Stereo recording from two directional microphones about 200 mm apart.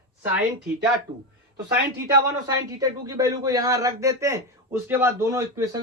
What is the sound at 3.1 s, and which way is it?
A man's voice, 15° right (ahead or behind).